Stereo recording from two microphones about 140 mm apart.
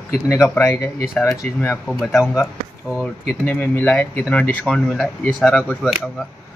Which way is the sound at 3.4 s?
15° left (ahead or behind).